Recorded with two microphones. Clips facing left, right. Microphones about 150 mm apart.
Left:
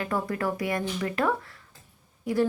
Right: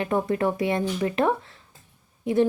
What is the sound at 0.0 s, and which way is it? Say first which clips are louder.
A woman's voice: right 5 dB; 20° right (ahead or behind).